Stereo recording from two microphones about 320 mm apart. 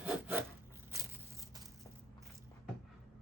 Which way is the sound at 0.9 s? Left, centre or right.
Centre.